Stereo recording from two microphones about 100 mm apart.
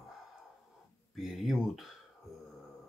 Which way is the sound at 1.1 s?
Centre (ahead or behind).